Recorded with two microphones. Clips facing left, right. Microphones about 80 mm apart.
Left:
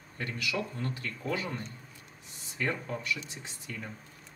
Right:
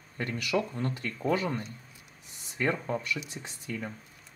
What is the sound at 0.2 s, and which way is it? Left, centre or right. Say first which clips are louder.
Speech: right 4 dB; right.